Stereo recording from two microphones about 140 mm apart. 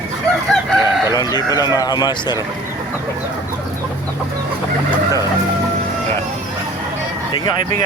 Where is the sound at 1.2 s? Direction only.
30° left (ahead or behind).